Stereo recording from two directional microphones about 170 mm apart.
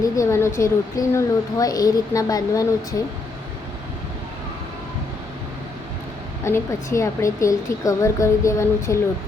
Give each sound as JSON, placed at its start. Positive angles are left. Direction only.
{"t": 0.0, "sound": "speech", "side_deg": 15}
{"t": 6.4, "sound": "a woman's voice", "side_deg": 15}